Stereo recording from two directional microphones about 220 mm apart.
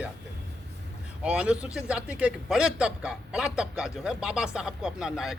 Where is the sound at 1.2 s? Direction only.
5° right (ahead or behind).